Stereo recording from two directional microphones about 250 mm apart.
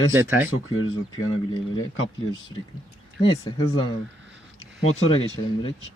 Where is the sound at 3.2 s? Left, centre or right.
Left.